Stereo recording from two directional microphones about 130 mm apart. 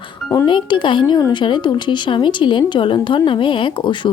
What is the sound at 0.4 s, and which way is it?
Speech, 35° left (ahead or behind).